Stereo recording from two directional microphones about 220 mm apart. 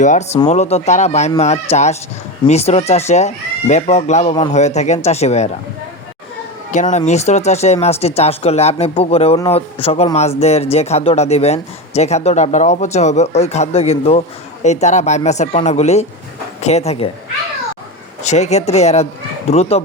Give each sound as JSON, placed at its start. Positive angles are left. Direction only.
{"t": 0.0, "sound": "speech", "side_deg": 35}
{"t": 6.7, "sound": "speech", "side_deg": 35}
{"t": 18.2, "sound": "speech", "side_deg": 30}